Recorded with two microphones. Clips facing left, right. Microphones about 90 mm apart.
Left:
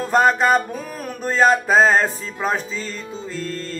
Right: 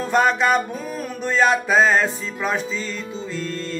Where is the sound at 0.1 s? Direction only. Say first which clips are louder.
Left 2 dB; 40° left (ahead or behind).